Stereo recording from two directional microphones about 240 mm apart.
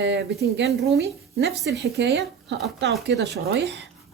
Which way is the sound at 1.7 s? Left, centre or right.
Right.